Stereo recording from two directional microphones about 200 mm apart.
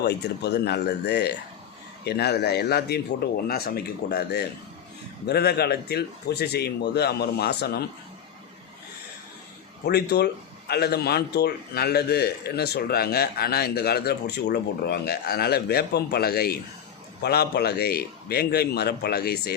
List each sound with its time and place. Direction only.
0.0 s a man's voice: 55° left (ahead or behind)
9.8 s a man's voice: 55° left (ahead or behind)